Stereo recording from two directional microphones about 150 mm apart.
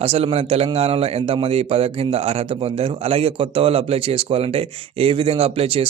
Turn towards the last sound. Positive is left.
turn(degrees=-40)  # may be behind; listen again after turning